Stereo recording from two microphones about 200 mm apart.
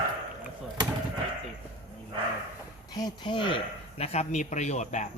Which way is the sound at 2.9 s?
20° left (ahead or behind).